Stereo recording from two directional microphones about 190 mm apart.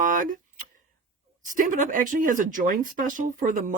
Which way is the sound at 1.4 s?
45° right (ahead or behind).